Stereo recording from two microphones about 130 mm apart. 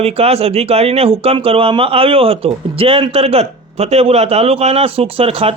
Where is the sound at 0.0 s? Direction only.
50° right (ahead or behind).